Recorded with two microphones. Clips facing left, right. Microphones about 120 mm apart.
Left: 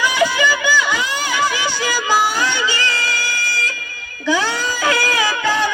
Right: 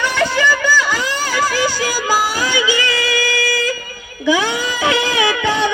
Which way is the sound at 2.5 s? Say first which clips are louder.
Right 3 dB; 10° right (ahead or behind).